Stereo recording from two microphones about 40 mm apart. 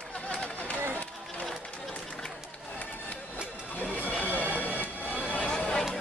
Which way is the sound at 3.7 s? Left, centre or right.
Left.